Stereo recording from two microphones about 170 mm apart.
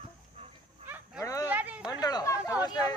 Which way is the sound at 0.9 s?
10° right (ahead or behind).